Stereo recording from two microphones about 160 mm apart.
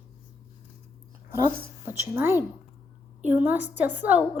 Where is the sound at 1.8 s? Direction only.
15° right (ahead or behind).